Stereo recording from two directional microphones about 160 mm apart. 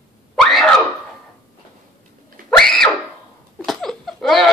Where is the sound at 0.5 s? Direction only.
Centre (ahead or behind).